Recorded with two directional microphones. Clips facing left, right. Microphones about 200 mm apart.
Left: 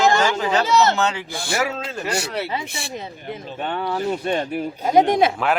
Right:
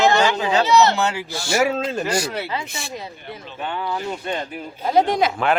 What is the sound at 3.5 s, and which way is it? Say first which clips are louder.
Speech: left 1 dB; 35° left (ahead or behind).